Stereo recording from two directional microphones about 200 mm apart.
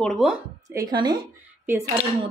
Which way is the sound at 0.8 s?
20° right (ahead or behind).